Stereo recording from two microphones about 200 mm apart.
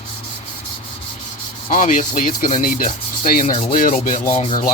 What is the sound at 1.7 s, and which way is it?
Speech, 40° left (ahead or behind).